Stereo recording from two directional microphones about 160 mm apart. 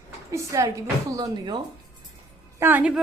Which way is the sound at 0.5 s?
20° right (ahead or behind).